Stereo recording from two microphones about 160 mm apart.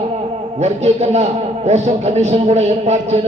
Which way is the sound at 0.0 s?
40° right (ahead or behind).